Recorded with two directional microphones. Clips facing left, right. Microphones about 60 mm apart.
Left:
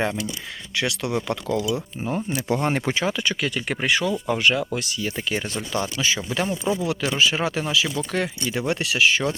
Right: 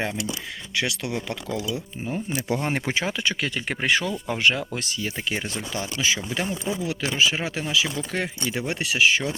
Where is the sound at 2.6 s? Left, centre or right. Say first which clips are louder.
Left 3 dB; centre; by 5.0 s right.